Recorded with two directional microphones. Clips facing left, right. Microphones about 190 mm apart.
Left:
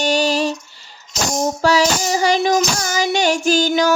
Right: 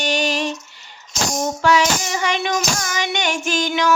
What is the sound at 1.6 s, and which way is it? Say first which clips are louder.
Child singing: left 1 dB; 35° left (ahead or behind).